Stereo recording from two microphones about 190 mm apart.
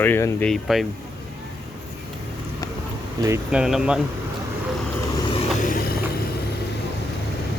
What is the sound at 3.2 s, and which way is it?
Speech, 15° right (ahead or behind).